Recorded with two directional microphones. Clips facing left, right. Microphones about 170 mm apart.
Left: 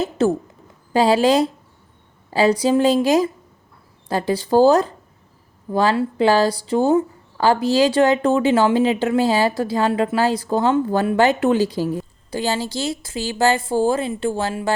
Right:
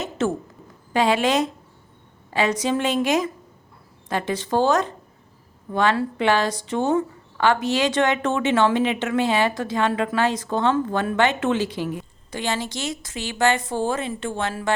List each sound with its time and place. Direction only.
0.2 s a woman's voice: 35° left (ahead or behind)